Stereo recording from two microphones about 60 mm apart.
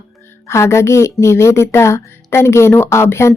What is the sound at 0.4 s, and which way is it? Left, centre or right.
Speech, left.